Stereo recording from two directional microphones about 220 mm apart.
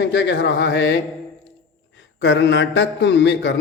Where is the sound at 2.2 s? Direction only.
55° left (ahead or behind).